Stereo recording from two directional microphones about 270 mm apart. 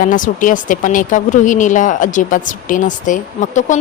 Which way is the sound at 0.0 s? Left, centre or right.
Left.